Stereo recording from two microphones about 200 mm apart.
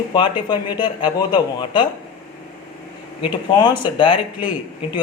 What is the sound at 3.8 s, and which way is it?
Speech, 25° left (ahead or behind).